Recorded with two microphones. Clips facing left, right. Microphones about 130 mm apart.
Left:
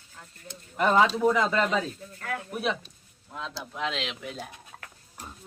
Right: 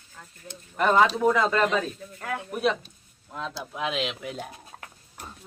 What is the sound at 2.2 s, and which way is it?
Speech, 20° right (ahead or behind).